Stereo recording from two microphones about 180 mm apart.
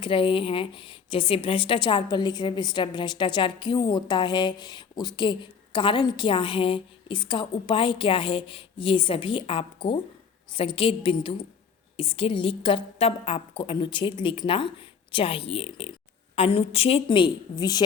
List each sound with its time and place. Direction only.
0.0 s speech: 30° left (ahead or behind)